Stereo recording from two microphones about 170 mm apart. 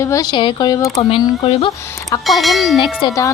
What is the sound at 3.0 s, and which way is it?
Speech, 20° left (ahead or behind).